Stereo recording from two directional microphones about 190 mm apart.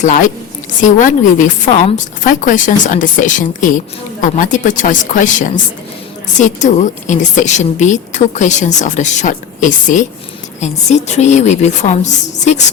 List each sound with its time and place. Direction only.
0.0 s a woman's voice: 45° left (ahead or behind)